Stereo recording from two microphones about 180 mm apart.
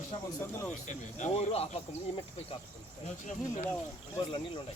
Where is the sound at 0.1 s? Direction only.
30° left (ahead or behind).